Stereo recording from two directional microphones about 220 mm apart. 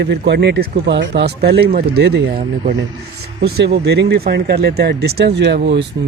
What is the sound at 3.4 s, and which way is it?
Speech, 50° right (ahead or behind).